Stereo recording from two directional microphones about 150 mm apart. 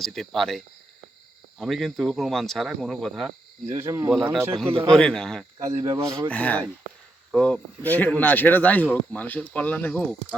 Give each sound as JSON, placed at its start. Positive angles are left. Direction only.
{"t": 0.0, "sound": "speech", "side_deg": 0}
{"t": 3.7, "sound": "speech", "side_deg": -20}
{"t": 4.5, "sound": "speech", "side_deg": 5}
{"t": 5.6, "sound": "speech", "side_deg": -25}
{"t": 6.3, "sound": "speech", "side_deg": 10}